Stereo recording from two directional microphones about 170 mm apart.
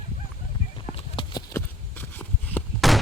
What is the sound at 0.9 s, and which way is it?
Clip-clop, 30° left (ahead or behind).